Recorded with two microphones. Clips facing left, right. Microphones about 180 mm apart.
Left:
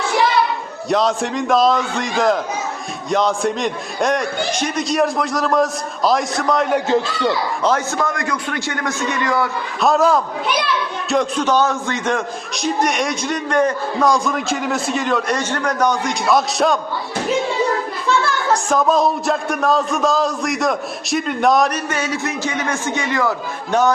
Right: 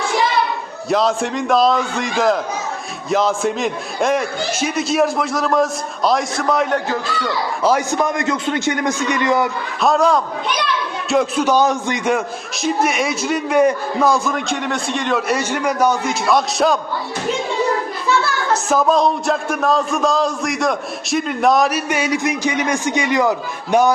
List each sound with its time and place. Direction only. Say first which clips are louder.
0.9 s a man's voice: even; centre (ahead or behind)
6.7 s a man's voice: left 3 dB; 20° left (ahead or behind)
7.6 s a man's voice: right 4 dB; 10° right (ahead or behind)
9.8 s a man's voice: even; centre (ahead or behind)
18.7 s a man's voice: right 2 dB; centre (ahead or behind)